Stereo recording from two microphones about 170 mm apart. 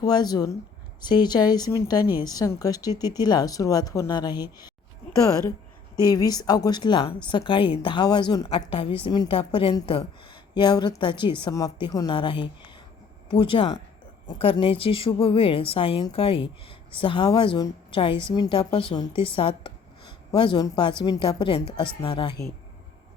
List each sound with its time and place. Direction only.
0.0 s speech: 25° left (ahead or behind)
6.0 s a woman's voice: 20° left (ahead or behind)